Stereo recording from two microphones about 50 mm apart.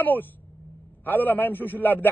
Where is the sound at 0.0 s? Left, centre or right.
Left.